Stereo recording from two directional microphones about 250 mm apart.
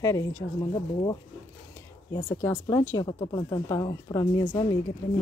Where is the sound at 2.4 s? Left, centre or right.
Centre.